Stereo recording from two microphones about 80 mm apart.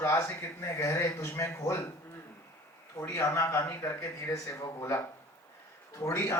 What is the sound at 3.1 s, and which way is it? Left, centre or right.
Speech, left.